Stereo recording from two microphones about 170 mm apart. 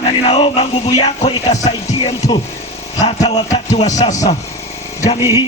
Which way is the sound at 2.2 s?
20° left (ahead or behind).